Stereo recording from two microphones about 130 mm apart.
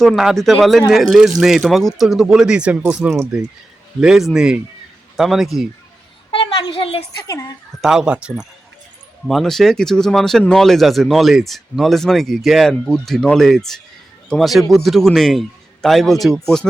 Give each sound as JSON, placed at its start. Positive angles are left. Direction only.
{"t": 0.0, "sound": "speech", "side_deg": 0}
{"t": 6.3, "sound": "a sound", "side_deg": 45}
{"t": 7.8, "sound": "speech", "side_deg": -5}